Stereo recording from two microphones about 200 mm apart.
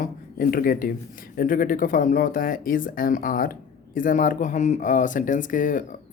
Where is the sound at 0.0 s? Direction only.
45° left (ahead or behind).